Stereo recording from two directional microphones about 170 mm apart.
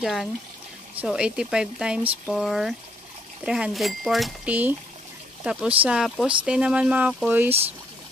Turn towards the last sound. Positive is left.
turn(degrees=-10)  # may be behind; listen again after turning